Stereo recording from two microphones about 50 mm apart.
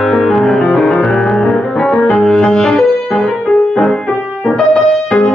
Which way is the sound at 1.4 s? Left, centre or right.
Centre.